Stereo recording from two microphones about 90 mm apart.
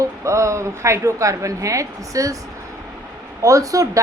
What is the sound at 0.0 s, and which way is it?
A woman's voice, 35° right (ahead or behind).